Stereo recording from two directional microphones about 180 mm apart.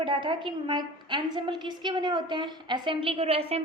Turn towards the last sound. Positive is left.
turn(degrees=-35)  # may be behind; listen again after turning